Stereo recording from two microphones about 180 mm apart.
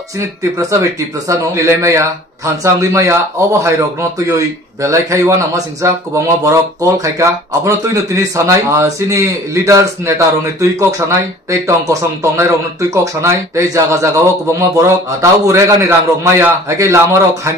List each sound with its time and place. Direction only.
0.4 s speech: 15° right (ahead or behind)
4.8 s speech: 15° right (ahead or behind)